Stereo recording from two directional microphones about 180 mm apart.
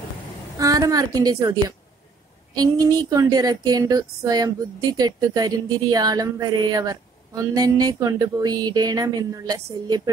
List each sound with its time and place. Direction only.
0.6 s speech: 20° right (ahead or behind)